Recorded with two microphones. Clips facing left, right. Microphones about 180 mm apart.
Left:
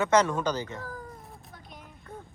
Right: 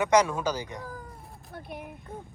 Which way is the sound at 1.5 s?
60° right (ahead or behind).